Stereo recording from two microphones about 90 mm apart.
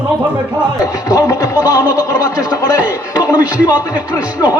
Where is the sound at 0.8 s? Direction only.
40° left (ahead or behind).